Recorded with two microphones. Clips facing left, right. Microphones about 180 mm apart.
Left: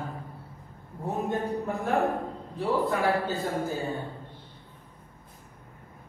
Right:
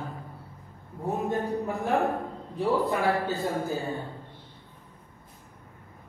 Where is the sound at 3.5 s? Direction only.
15° right (ahead or behind).